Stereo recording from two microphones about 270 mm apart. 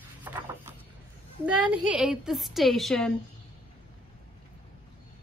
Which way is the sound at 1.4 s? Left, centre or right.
Centre.